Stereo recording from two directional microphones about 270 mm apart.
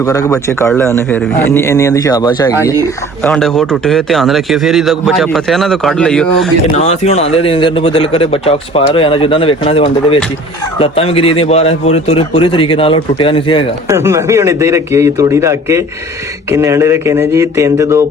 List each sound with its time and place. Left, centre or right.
0.0 s a man's voice: centre
3.2 s a man's voice: centre
6.7 s speech: left
13.9 s a man's voice: centre